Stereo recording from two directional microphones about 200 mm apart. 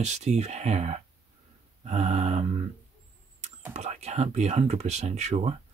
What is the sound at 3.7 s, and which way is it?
Speech, 35° right (ahead or behind).